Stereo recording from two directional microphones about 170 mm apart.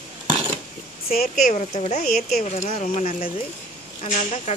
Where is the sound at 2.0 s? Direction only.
60° left (ahead or behind).